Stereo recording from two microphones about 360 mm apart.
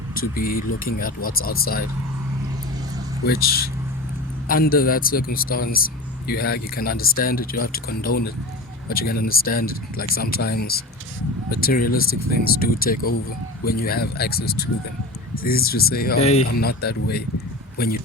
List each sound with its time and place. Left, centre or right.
0.2 s speech: left
3.2 s speech: left